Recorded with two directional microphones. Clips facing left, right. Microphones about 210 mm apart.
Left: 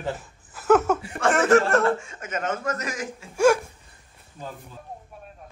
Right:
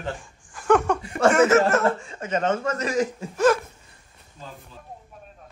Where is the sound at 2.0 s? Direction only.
30° right (ahead or behind).